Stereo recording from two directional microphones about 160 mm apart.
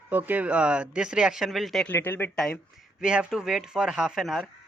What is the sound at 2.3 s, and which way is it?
Speech, 5° left (ahead or behind).